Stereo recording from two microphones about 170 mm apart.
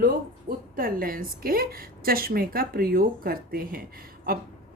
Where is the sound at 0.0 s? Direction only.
60° right (ahead or behind).